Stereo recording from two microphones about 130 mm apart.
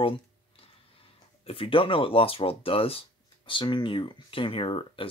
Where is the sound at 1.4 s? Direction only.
45° left (ahead or behind).